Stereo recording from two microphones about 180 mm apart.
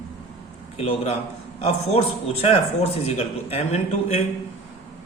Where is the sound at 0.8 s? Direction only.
35° left (ahead or behind).